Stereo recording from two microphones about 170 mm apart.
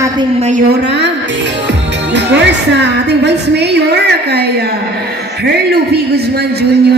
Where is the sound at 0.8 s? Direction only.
90° right.